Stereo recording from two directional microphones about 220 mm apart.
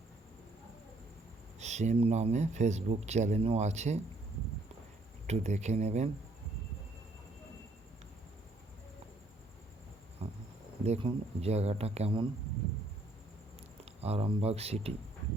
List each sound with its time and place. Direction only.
1.5 s speech: 30° right (ahead or behind)
5.2 s speech: 30° right (ahead or behind)
10.8 s speech: 30° right (ahead or behind)
13.8 s speech: 30° right (ahead or behind)